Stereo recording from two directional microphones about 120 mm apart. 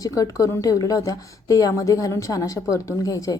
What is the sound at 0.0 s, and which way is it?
A woman's voice, 30° left (ahead or behind).